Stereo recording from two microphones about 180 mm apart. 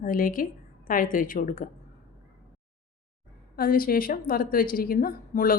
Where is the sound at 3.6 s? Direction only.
55° left (ahead or behind).